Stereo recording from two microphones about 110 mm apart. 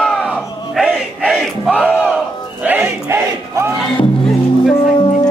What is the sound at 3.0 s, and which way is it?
Battle cry, 25° right (ahead or behind).